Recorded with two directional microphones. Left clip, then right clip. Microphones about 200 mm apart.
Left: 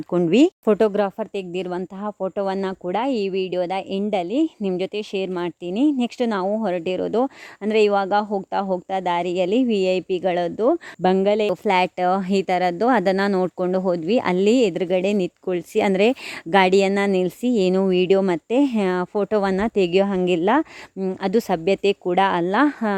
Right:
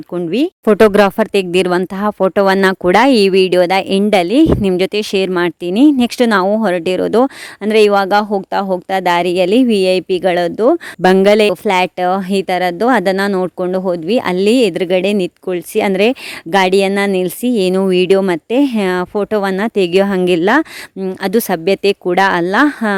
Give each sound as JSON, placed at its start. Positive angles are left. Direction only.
{"t": 0.1, "sound": "speech", "side_deg": 5}
{"t": 0.8, "sound": "speech", "side_deg": -45}
{"t": 11.6, "sound": "speech", "side_deg": -20}